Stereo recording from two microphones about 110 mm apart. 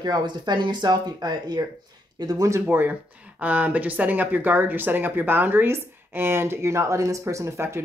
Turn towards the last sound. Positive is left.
turn(degrees=-25)  # may be behind; listen again after turning